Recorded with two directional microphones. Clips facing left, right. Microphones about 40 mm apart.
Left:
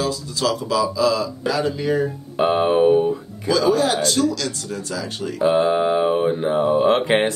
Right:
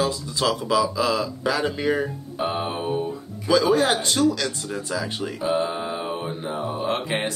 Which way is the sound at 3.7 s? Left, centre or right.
Right.